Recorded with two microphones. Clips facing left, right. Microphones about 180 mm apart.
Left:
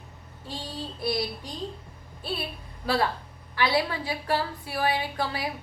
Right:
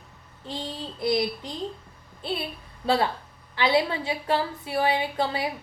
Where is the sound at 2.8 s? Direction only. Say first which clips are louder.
Right 2 dB; 25° right (ahead or behind).